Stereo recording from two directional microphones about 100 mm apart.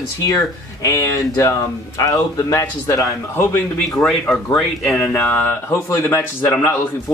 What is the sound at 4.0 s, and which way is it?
Speech, 10° left (ahead or behind).